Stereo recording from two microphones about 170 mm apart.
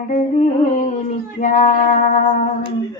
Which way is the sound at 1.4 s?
45° left (ahead or behind).